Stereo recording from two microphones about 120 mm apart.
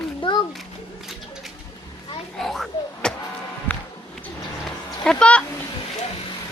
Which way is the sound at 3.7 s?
15° left (ahead or behind).